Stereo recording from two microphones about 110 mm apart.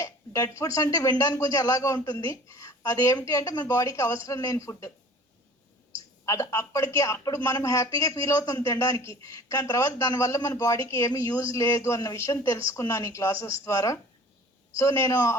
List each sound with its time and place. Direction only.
0.0 s speech: 30° left (ahead or behind)
6.2 s speech: 30° left (ahead or behind)